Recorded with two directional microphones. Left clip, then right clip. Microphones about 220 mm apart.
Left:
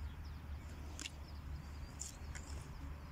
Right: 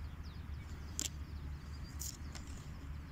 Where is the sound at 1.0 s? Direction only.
30° right (ahead or behind).